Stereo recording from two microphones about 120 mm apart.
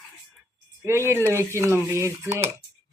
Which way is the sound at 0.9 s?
20° right (ahead or behind).